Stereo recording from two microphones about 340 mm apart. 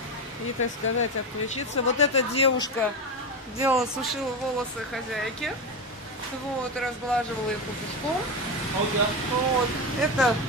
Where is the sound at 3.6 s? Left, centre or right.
Centre.